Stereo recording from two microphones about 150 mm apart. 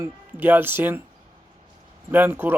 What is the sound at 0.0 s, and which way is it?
Speech, 15° right (ahead or behind).